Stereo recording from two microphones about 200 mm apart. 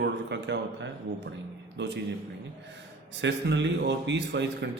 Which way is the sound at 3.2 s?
65° right (ahead or behind).